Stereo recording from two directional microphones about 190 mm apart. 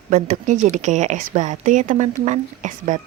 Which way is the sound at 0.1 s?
40° right (ahead or behind).